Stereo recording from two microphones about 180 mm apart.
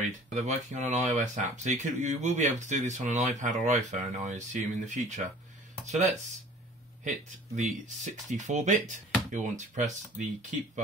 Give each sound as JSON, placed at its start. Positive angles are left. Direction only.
{"t": 0.3, "sound": "speech", "side_deg": -40}
{"t": 7.2, "sound": "speech", "side_deg": -40}